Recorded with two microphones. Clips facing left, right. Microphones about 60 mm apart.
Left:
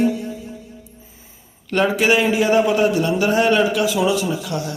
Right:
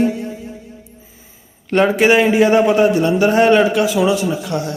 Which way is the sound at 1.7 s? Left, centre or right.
Right.